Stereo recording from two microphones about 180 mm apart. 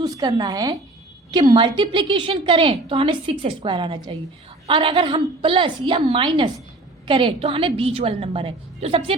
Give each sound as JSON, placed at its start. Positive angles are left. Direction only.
{"t": 0.0, "sound": "a woman's voice", "side_deg": -20}